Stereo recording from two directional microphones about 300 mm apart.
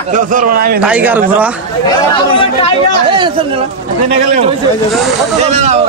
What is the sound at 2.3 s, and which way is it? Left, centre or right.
Speech, centre.